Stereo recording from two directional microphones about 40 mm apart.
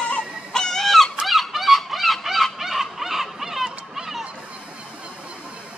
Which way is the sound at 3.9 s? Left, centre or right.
Centre.